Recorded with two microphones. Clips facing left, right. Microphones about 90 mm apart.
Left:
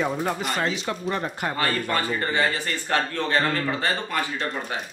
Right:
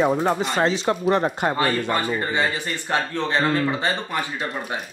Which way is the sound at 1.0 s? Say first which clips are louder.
Right 7 dB; 40° right (ahead or behind).